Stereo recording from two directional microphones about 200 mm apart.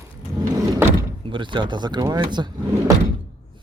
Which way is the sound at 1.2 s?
25° right (ahead or behind).